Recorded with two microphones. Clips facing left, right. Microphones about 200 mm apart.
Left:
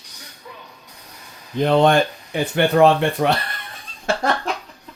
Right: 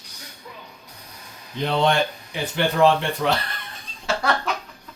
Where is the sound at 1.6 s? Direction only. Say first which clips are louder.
Left 6 dB; 50° left (ahead or behind).